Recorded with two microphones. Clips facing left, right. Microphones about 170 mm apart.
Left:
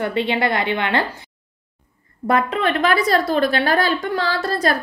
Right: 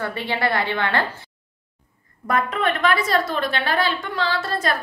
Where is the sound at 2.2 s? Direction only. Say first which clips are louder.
Left 3 dB; 30° left (ahead or behind).